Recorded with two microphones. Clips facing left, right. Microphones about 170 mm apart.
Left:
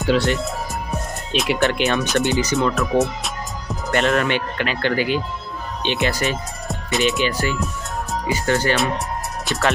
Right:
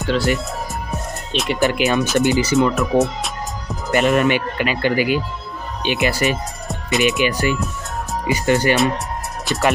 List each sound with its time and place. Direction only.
0.0 s speech: centre (ahead or behind)
2.7 s music: centre (ahead or behind)
4.1 s speech: 15° right (ahead or behind)
7.0 s speech: 15° right (ahead or behind)
8.7 s speech: centre (ahead or behind)